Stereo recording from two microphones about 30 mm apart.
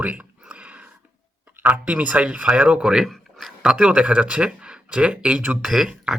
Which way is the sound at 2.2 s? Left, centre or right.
Right.